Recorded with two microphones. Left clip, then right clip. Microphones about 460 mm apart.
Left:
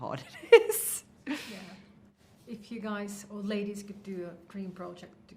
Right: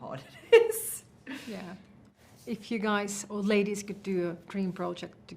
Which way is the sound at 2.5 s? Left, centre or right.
Right.